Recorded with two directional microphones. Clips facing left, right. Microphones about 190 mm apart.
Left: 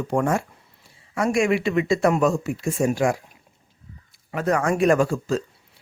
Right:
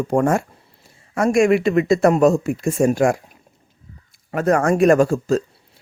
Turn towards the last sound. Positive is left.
turn(degrees=-45)  # may be behind; listen again after turning